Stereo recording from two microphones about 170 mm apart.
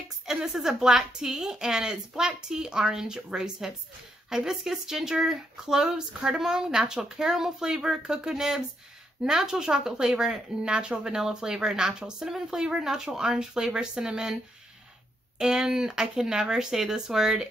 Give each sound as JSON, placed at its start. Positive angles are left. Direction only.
{"t": 0.3, "sound": "a woman's voice", "side_deg": 0}
{"t": 15.3, "sound": "a woman's voice", "side_deg": -5}